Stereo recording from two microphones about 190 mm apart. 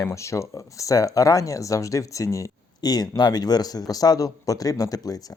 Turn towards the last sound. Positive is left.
turn(degrees=20)  # may be behind; listen again after turning